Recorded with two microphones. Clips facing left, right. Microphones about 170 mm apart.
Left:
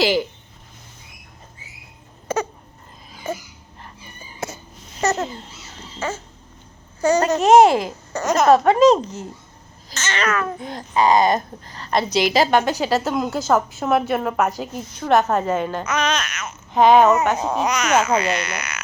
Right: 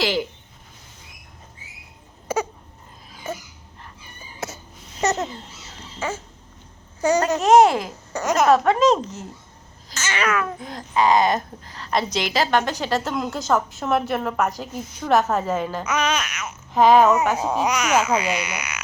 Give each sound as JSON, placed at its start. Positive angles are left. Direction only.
{"t": 2.2, "sound": "crying", "side_deg": -10}
{"t": 3.3, "sound": "a woman's voice", "side_deg": -5}
{"t": 4.4, "sound": "a sound", "side_deg": 0}
{"t": 5.0, "sound": "a sound", "side_deg": -20}
{"t": 6.0, "sound": "cat", "side_deg": -15}
{"t": 7.3, "sound": "a woman's voice", "side_deg": 0}
{"t": 8.1, "sound": "cat", "side_deg": -10}
{"t": 8.6, "sound": "a woman's voice", "side_deg": 0}
{"t": 9.9, "sound": "cat", "side_deg": -10}
{"t": 10.6, "sound": "a woman's voice", "side_deg": 0}
{"t": 12.2, "sound": "a woman's voice", "side_deg": 10}